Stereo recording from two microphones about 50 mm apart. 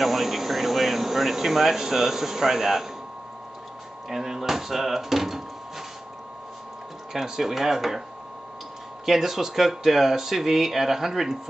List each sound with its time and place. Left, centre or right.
0.0 s speech: centre
4.1 s speech: centre
7.1 s speech: centre
9.0 s speech: centre